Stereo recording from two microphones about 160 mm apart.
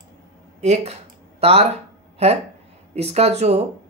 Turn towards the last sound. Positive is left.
turn(degrees=-40)  # may be behind; listen again after turning